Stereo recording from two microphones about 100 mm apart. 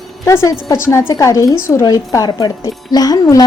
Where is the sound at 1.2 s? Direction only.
35° left (ahead or behind).